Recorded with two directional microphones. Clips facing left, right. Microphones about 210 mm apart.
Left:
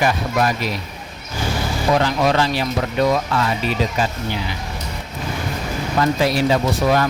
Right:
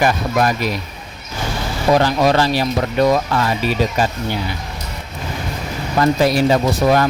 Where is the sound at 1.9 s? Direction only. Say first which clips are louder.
Right 3 dB; 40° right (ahead or behind).